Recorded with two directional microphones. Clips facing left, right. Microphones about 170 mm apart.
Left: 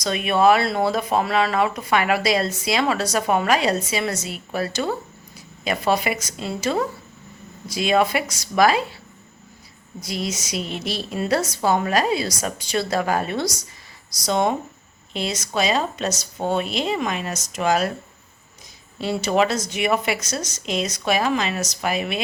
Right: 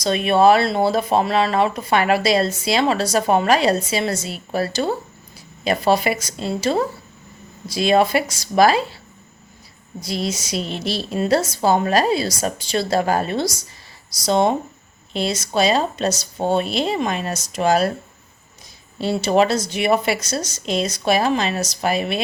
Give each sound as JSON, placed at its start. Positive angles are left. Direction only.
{"t": 0.0, "sound": "speech", "side_deg": -30}
{"t": 10.0, "sound": "a woman's voice", "side_deg": -30}
{"t": 18.9, "sound": "speech", "side_deg": -30}